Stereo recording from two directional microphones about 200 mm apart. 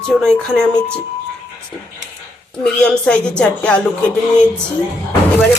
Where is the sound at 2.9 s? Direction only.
5° left (ahead or behind).